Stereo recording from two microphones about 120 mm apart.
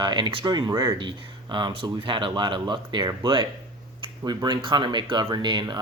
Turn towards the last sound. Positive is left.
turn(degrees=-40)  # may be behind; listen again after turning